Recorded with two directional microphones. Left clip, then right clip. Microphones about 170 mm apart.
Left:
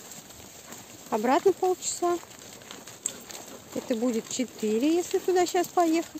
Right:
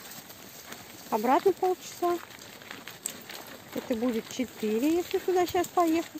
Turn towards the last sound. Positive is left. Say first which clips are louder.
# left 2 dB
turn(degrees=15)  # may be behind; listen again after turning